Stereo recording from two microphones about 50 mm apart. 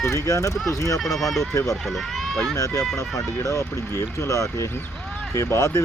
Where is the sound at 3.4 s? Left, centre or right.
Left.